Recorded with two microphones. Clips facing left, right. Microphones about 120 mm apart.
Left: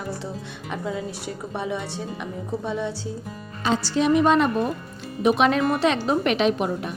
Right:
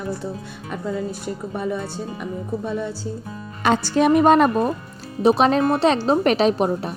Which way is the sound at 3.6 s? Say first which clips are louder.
Right 4 dB; 55° right (ahead or behind).